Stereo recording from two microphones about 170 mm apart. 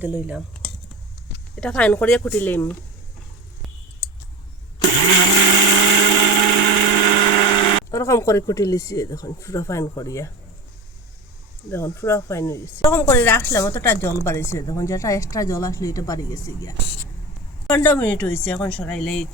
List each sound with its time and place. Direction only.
1.6 s speech: 5° left (ahead or behind)
4.8 s blender: 25° left (ahead or behind)
11.7 s speech: 15° left (ahead or behind)